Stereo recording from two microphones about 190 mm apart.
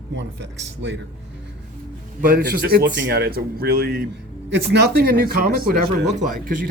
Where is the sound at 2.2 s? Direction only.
50° right (ahead or behind).